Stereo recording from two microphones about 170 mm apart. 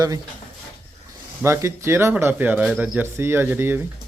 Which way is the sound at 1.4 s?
15° right (ahead or behind).